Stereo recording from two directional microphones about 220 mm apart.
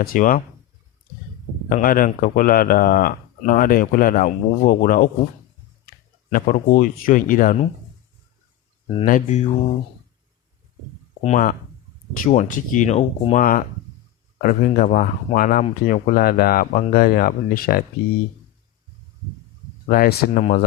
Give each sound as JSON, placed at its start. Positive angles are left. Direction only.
{"t": 0.0, "sound": "a man's voice", "side_deg": 40}
{"t": 1.7, "sound": "a man's voice", "side_deg": 40}
{"t": 6.3, "sound": "a man's voice", "side_deg": 40}
{"t": 9.0, "sound": "a man's voice", "side_deg": 35}
{"t": 11.2, "sound": "a man's voice", "side_deg": 35}
{"t": 19.9, "sound": "a man's voice", "side_deg": 40}